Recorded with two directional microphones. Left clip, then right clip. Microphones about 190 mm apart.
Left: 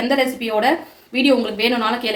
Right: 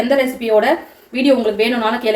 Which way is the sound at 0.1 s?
45° left (ahead or behind).